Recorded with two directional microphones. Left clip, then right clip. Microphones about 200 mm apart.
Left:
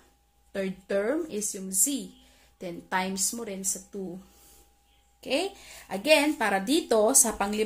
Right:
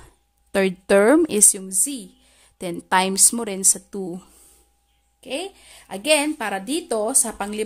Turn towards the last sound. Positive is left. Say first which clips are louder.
# even
turn(degrees=-20)  # may be behind; listen again after turning